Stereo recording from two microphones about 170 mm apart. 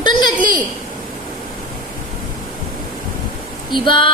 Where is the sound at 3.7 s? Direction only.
25° left (ahead or behind).